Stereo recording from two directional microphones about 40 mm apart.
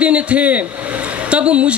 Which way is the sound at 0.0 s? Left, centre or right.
Right.